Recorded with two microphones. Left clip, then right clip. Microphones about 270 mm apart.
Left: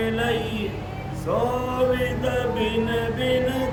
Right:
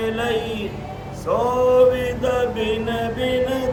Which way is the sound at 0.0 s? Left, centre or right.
Centre.